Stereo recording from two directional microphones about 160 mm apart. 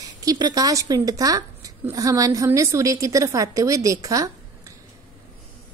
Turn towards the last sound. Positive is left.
turn(degrees=-20)  # may be behind; listen again after turning